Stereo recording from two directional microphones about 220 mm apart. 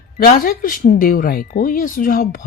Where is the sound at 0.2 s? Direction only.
40° left (ahead or behind).